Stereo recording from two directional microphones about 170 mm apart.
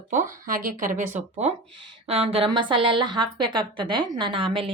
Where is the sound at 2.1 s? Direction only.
35° right (ahead or behind).